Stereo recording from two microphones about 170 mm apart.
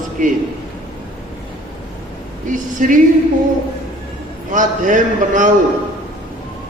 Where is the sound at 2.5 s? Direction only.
50° right (ahead or behind).